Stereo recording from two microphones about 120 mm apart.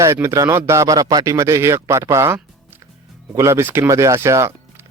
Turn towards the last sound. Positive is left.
turn(degrees=-25)  # may be behind; listen again after turning